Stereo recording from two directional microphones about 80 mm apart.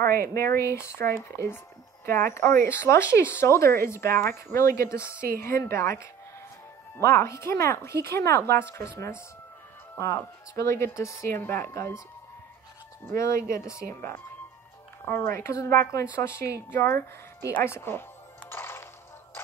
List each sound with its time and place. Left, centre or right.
0.0 s speech: left
13.0 s speech: left
15.0 s speech: left
15.9 s speech: left
18.4 s music: left